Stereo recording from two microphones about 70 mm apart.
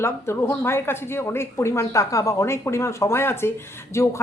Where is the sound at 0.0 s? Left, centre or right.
Left.